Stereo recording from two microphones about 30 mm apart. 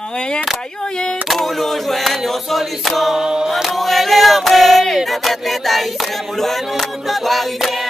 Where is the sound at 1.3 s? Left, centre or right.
Centre.